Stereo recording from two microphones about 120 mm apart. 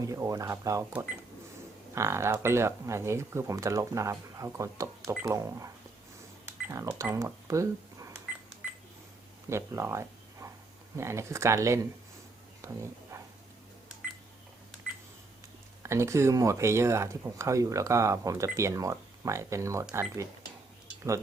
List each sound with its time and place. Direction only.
0.0 s speech: 30° right (ahead or behind)
2.0 s speech: 25° right (ahead or behind)
6.7 s speech: 25° right (ahead or behind)
9.5 s speech: 20° right (ahead or behind)
12.6 s a sound: 25° right (ahead or behind)
15.8 s speech: 25° right (ahead or behind)